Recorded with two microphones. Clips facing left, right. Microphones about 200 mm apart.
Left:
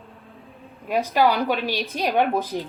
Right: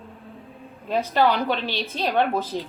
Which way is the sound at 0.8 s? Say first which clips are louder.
Left 1 dB; 10° left (ahead or behind).